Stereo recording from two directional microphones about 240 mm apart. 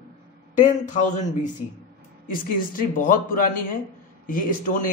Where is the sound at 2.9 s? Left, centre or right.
Left.